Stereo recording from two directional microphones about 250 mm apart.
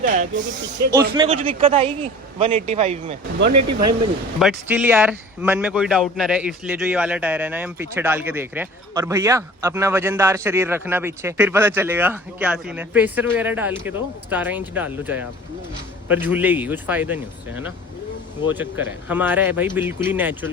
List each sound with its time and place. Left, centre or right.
0.0 s speech: right
1.1 s speech: right
3.5 s speech: right
4.4 s a man's voice: centre
18.4 s speech: centre